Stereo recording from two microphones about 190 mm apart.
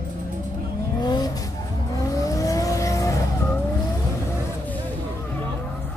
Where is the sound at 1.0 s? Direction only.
20° left (ahead or behind).